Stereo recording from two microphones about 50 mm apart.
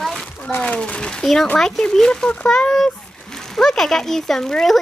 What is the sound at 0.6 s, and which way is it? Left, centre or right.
A child's voice, left.